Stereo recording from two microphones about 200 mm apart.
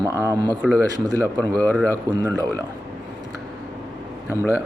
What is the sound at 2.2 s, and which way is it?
Speech, 15° right (ahead or behind).